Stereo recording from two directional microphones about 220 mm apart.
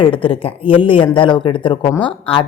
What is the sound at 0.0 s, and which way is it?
A woman's voice, 25° left (ahead or behind).